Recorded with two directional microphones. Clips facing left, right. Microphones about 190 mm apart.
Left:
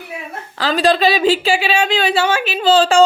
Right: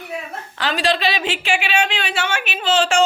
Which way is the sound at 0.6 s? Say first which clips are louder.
Left 6 dB; 40° left (ahead or behind).